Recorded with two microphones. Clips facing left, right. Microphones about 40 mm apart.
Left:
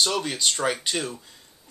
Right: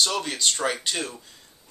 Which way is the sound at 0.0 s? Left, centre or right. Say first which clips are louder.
Even; centre.